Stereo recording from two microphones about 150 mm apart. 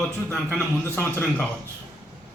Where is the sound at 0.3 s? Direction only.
10° left (ahead or behind).